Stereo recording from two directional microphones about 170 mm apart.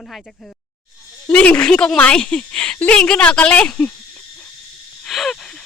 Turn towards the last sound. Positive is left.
turn(degrees=5)  # may be behind; listen again after turning